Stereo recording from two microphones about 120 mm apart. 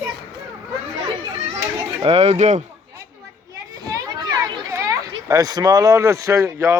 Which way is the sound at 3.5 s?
30° right (ahead or behind).